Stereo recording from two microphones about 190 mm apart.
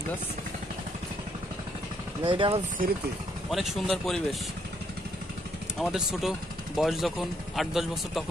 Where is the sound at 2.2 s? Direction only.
30° right (ahead or behind).